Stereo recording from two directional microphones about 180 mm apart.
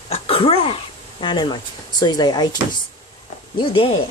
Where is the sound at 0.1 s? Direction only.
35° left (ahead or behind).